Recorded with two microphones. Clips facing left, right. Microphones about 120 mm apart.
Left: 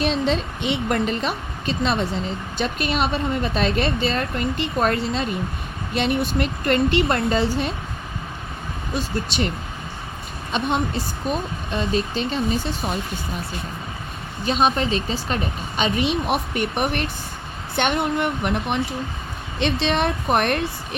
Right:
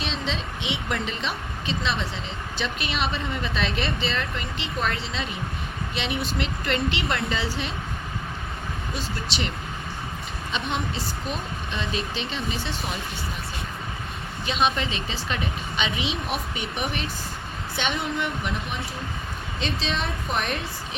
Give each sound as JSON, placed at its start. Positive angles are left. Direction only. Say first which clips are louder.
{"t": 0.0, "sound": "speech", "louder": "left 9 dB", "side_deg": 55}
{"t": 9.0, "sound": "speech", "louder": "left 8 dB", "side_deg": 50}
{"t": 10.5, "sound": "speech", "louder": "left 7 dB", "side_deg": 50}
{"t": 14.6, "sound": "speech", "louder": "left 4 dB", "side_deg": 40}
{"t": 16.0, "sound": "speech", "louder": "left 7 dB", "side_deg": 55}